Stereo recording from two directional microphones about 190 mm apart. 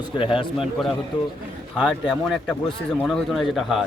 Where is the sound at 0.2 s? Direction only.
25° left (ahead or behind).